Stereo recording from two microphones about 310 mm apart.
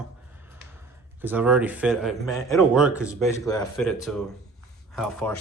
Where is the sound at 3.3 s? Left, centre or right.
Centre.